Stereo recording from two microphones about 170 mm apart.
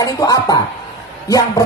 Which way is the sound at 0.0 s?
20° left (ahead or behind).